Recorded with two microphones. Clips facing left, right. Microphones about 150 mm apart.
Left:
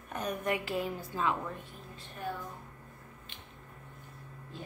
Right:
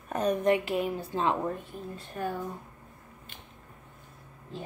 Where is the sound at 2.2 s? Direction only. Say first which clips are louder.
Right 5 dB; 55° right (ahead or behind).